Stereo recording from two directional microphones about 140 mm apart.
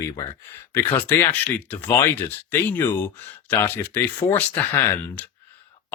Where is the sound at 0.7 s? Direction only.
15° left (ahead or behind).